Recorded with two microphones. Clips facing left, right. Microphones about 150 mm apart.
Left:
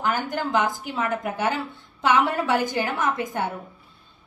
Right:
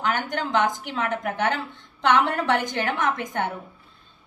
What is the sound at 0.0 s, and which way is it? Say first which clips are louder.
A woman's voice: left 1 dB; 5° left (ahead or behind).